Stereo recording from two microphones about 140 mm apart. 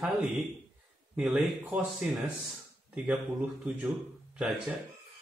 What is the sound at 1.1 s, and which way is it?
Speech, 10° right (ahead or behind).